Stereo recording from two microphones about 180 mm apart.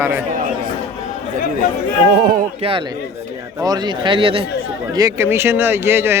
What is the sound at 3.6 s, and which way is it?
Speech, 25° right (ahead or behind).